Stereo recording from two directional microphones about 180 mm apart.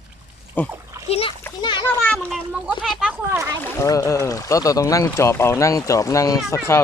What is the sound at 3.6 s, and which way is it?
Speech, 15° left (ahead or behind).